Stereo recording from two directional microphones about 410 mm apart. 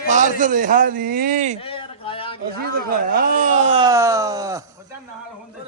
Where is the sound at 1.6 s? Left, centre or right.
Centre.